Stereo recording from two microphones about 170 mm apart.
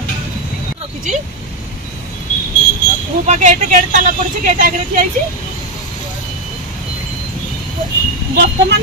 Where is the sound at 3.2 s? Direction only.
45° right (ahead or behind).